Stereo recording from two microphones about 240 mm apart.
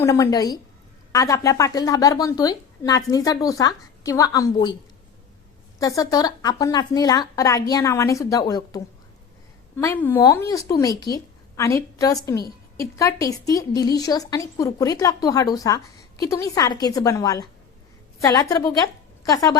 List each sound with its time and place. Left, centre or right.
0.0 s a woman's voice: centre
5.8 s a woman's voice: centre